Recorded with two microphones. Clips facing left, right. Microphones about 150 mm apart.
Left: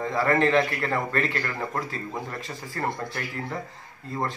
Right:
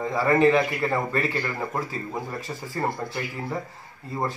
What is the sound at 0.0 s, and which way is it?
A man's voice, 5° right (ahead or behind).